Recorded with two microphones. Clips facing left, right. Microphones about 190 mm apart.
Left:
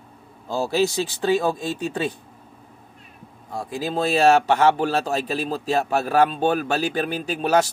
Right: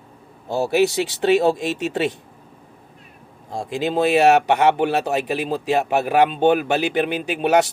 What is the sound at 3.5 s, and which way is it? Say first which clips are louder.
A man's voice: right 4 dB; 25° right (ahead or behind).